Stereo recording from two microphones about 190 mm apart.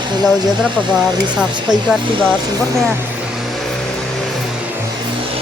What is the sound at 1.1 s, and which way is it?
Speech, 25° right (ahead or behind).